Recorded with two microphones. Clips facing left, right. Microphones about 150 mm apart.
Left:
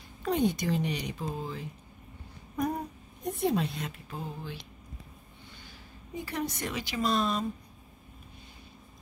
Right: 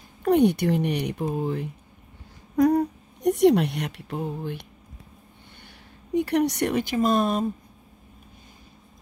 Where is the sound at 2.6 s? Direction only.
90° right; by 4.6 s 60° right (ahead or behind).